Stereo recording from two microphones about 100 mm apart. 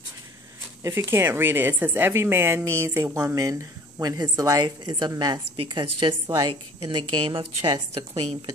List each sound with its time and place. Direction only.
0.8 s a woman's voice: 25° right (ahead or behind)
4.6 s a woman's voice: 50° right (ahead or behind)
5.6 s a woman's voice: 60° right (ahead or behind)
6.2 s a woman's voice: 40° right (ahead or behind)
6.5 s a woman's voice: 60° right (ahead or behind)